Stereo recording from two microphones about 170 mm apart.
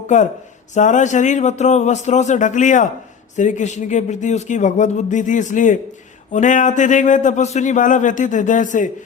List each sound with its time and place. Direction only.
0.7 s speech: 45° left (ahead or behind)